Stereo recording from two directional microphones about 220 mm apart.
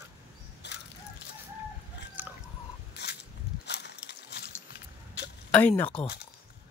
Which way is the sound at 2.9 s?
50° left (ahead or behind).